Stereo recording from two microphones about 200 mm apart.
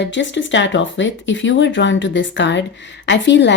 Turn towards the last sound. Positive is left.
turn(degrees=60)  # may be behind; listen again after turning